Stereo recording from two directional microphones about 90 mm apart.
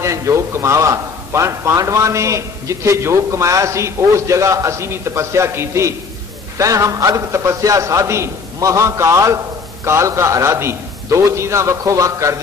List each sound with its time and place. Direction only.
0.0 s a man's voice: 35° right (ahead or behind)